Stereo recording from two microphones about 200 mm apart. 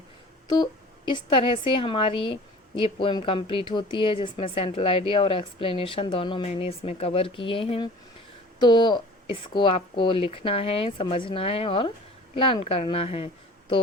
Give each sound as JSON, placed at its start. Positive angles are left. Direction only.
{"t": 0.5, "sound": "a woman's voice", "side_deg": 20}